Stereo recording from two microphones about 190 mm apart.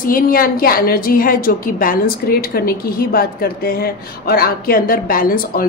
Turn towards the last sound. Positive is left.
turn(degrees=50)  # may be behind; listen again after turning